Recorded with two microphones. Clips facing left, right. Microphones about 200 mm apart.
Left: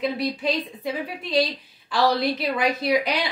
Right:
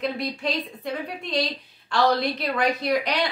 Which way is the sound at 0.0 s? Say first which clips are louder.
Left 3 dB; 5° left (ahead or behind).